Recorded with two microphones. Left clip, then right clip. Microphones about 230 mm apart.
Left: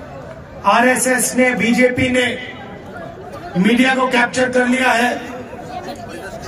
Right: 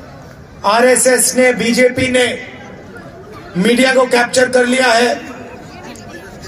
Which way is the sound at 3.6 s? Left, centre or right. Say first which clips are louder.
Right 4 dB; right.